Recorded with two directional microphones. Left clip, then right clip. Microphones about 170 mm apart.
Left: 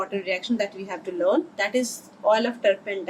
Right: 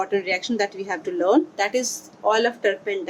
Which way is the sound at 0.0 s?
40° right (ahead or behind).